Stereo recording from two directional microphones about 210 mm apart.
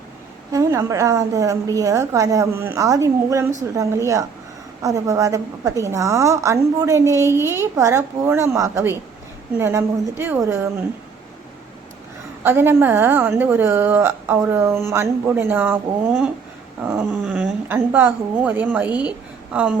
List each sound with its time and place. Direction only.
0.5 s a woman's voice: 15° right (ahead or behind)
12.4 s a woman's voice: 10° right (ahead or behind)
16.8 s a woman's voice: 10° right (ahead or behind)